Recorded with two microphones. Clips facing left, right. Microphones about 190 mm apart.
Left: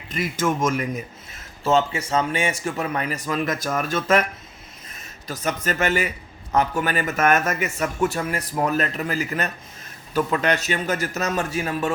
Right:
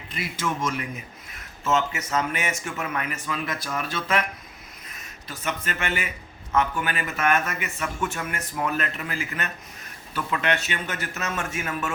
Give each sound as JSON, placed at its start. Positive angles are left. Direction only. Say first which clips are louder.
{"t": 0.1, "sound": "speech", "louder": "left 6 dB", "side_deg": 45}
{"t": 1.3, "sound": "speech", "louder": "left 4 dB", "side_deg": 30}
{"t": 5.3, "sound": "speech", "louder": "left 5 dB", "side_deg": 40}